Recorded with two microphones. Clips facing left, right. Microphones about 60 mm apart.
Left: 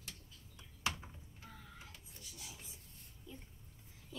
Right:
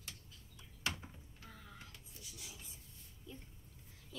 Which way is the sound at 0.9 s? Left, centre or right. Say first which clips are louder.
Even; centre.